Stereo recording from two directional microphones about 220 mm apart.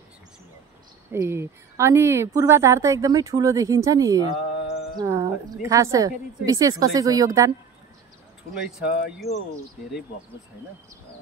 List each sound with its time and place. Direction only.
1.1 s a woman's voice: 10° right (ahead or behind)
8.6 s speech: centre (ahead or behind)